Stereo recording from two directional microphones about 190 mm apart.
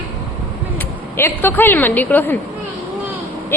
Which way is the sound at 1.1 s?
10° left (ahead or behind).